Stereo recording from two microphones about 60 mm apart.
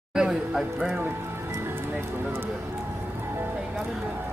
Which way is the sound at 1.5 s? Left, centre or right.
Right.